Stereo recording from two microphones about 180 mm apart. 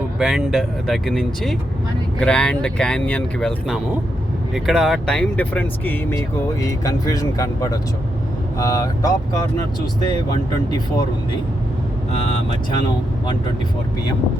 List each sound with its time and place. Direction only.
0.2 s speech: centre (ahead or behind); by 9.4 s 20° left (ahead or behind)